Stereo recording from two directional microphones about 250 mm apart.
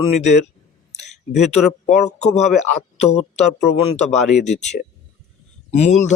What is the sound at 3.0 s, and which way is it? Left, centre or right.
A man's voice, left.